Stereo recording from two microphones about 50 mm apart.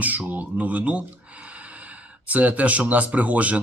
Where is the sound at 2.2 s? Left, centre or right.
Right.